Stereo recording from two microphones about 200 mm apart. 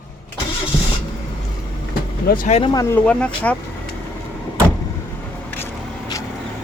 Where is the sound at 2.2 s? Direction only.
45° left (ahead or behind).